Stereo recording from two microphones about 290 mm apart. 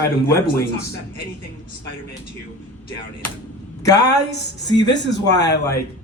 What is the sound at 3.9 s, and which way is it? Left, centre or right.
Speech, left.